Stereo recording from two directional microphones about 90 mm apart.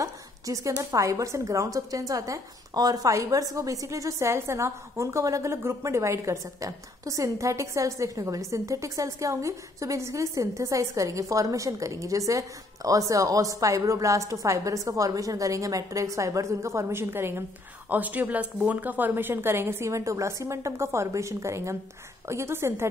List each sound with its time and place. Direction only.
0.0 s a woman's voice: 35° right (ahead or behind)